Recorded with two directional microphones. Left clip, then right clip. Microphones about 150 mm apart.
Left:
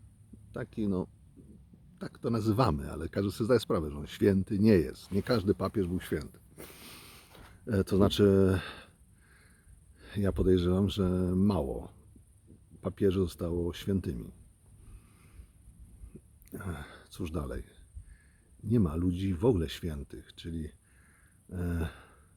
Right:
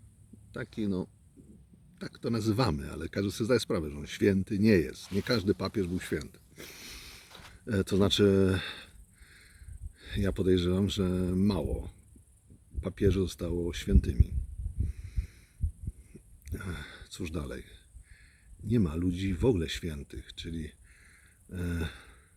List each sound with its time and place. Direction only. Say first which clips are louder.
0.5 s speech: even; 25° right (ahead or behind)
10.0 s speech: even; 20° right (ahead or behind)
15.0 s heart sounds: right 10 dB; 25° right (ahead or behind)
16.5 s a sound: right 1 dB; 20° right (ahead or behind)
18.7 s speech: even; 20° right (ahead or behind)
21.5 s a sound: even; 20° right (ahead or behind)